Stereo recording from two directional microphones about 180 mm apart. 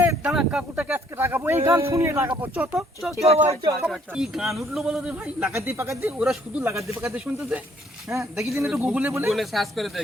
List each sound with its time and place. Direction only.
0.0 s a man's voice: 10° right (ahead or behind)
3.5 s speech: 15° right (ahead or behind)
3.8 s a man's voice: 5° right (ahead or behind)
9.3 s a man's voice: centre (ahead or behind)